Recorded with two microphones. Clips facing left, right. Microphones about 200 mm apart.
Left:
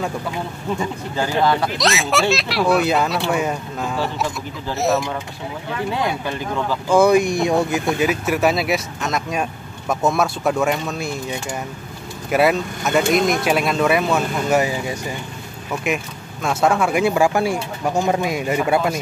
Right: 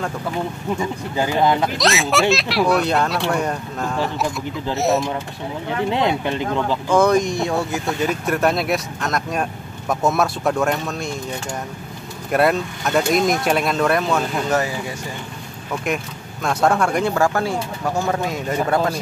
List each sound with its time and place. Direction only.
1.1 s speech: 15° right (ahead or behind)
1.8 s speech: centre (ahead or behind)
5.9 s speech: 20° right (ahead or behind)
6.9 s speech: 10° left (ahead or behind)
12.3 s speech: 5° left (ahead or behind)
15.7 s speech: 5° left (ahead or behind)